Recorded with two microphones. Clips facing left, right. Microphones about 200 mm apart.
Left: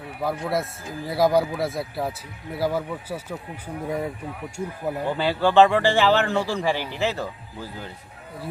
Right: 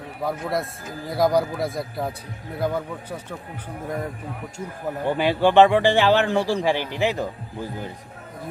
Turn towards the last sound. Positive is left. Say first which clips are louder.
# right 4 dB
turn(degrees=-15)  # may be behind; listen again after turning